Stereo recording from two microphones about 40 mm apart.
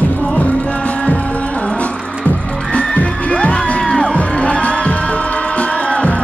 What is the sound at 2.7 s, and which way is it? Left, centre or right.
Music, left.